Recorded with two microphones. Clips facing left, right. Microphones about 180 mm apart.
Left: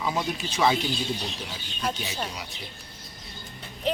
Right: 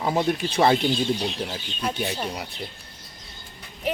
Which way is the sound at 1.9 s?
55° right (ahead or behind).